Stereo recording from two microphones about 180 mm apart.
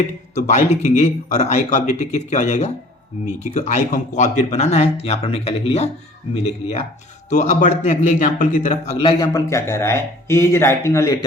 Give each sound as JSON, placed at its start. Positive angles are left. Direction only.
{"t": 0.3, "sound": "a man's voice", "side_deg": 40}
{"t": 9.0, "sound": "speech", "side_deg": 25}